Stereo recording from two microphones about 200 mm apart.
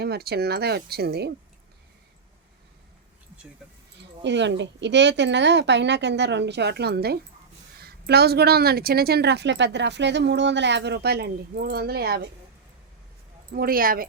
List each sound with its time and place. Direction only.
0.0 s a woman's voice: 50° right (ahead or behind)
4.0 s a woman's voice: 60° right (ahead or behind)
13.5 s a woman's voice: 45° right (ahead or behind)